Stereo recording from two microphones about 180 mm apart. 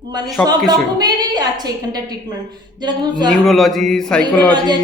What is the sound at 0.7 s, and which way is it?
A woman's voice, 20° right (ahead or behind).